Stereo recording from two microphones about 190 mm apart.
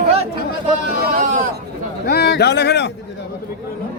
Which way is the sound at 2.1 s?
60° left (ahead or behind).